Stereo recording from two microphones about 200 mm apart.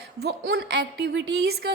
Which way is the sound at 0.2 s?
55° right (ahead or behind).